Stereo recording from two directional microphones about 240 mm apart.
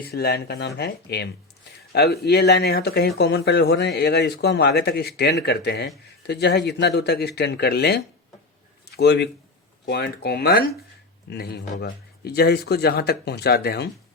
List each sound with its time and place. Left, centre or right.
0.0 s speech: left